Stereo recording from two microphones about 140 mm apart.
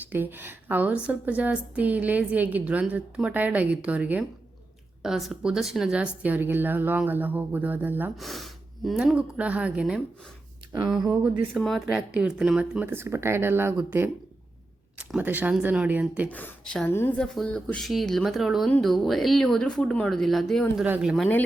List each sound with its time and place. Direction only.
0.0 s a woman's voice: 15° right (ahead or behind)
8.1 s speech: centre (ahead or behind)
11.5 s a woman's voice: centre (ahead or behind); by 13.7 s 15° right (ahead or behind)
14.9 s a woman's voice: 10° right (ahead or behind)
16.3 s speech: 10° left (ahead or behind)
17.2 s speech: 5° left (ahead or behind)
20.8 s speech: 10° right (ahead or behind)